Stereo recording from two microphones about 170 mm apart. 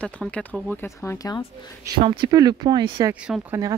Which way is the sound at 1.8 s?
25° right (ahead or behind).